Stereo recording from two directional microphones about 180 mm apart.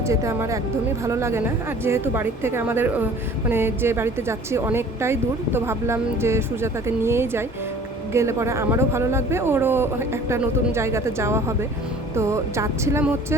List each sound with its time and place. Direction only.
0.1 s speech: 15° right (ahead or behind)